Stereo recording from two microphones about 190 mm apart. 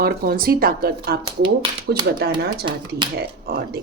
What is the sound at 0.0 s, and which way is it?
A woman's voice, 50° right (ahead or behind).